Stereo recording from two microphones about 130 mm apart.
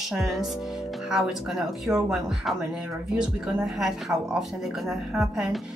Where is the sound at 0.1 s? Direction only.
Centre (ahead or behind).